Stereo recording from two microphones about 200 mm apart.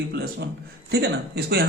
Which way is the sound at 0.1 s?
50° right (ahead or behind).